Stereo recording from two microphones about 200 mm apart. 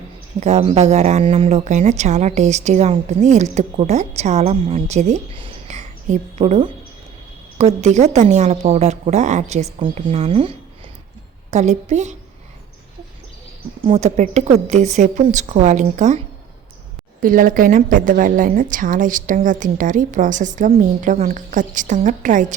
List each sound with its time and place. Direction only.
0.3 s speech: 35° right (ahead or behind)
11.5 s speech: 35° right (ahead or behind)
13.8 s speech: 35° right (ahead or behind)
17.2 s speech: 45° right (ahead or behind)